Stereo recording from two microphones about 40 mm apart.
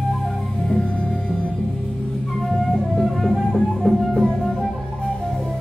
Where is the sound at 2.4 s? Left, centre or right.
Centre.